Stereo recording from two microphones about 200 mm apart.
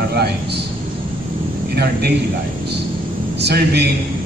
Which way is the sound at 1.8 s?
55° right (ahead or behind).